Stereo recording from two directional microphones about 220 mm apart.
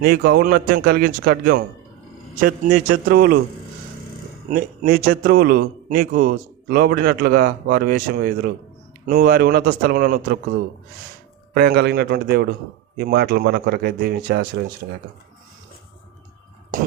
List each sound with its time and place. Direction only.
0.0 s a man's voice: 45° right (ahead or behind)
4.4 s a man's voice: 40° right (ahead or behind)
11.5 s a man's voice: 45° right (ahead or behind)